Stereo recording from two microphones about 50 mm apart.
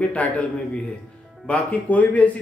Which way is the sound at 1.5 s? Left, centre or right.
Left.